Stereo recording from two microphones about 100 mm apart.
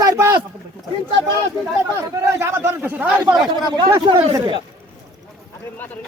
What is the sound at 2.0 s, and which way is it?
A man's voice, 30° right (ahead or behind).